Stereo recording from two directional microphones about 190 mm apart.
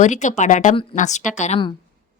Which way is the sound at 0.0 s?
40° left (ahead or behind).